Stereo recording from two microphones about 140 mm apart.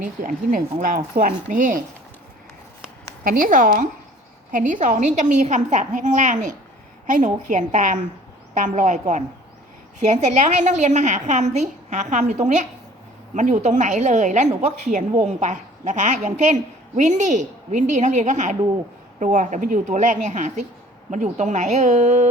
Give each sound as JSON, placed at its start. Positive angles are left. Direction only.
{"t": 0.0, "sound": "speech", "side_deg": -75}
{"t": 3.2, "sound": "a woman's voice", "side_deg": -85}